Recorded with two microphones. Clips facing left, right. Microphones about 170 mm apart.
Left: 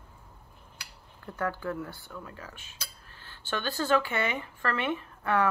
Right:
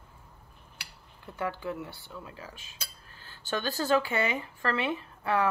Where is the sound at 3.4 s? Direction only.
40° right (ahead or behind).